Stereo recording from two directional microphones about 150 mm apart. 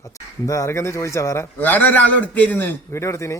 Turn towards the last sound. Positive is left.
turn(degrees=20)  # may be behind; listen again after turning